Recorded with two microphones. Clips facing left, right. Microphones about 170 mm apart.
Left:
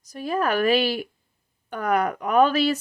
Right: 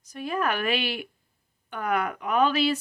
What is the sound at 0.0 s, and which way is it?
Speech, 40° left (ahead or behind).